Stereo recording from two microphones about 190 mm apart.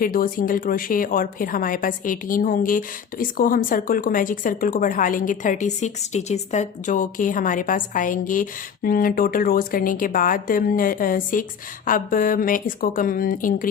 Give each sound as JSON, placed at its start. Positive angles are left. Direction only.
{"t": 0.0, "sound": "speech", "side_deg": 50}